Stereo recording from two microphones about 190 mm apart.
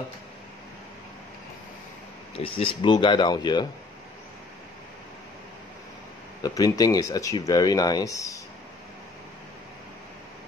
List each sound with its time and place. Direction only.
2.3 s speech: 30° left (ahead or behind)
6.4 s speech: 20° left (ahead or behind)